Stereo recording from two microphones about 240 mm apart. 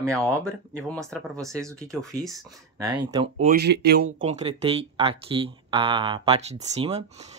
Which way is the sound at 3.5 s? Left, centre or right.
Right.